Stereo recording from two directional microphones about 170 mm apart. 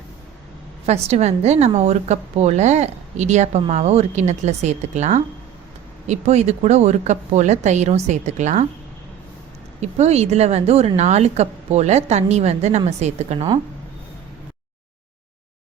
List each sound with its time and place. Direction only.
0.9 s a woman's voice: 40° right (ahead or behind)
10.0 s a woman's voice: 40° right (ahead or behind)